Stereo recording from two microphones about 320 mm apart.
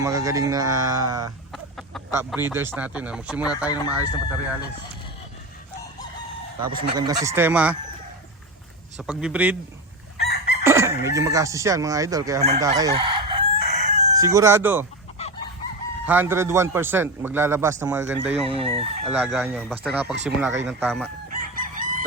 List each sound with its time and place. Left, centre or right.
0.0 s a man's voice: centre
1.5 s speech: centre
6.7 s a man's voice: centre
9.0 s speech: centre
10.2 s chicken: left
10.6 s speech: centre
12.4 s chicken: centre
14.2 s a man's voice: centre
15.2 s chicken: centre
16.0 s a man's voice: centre
19.1 s speech: centre
21.5 s chicken: right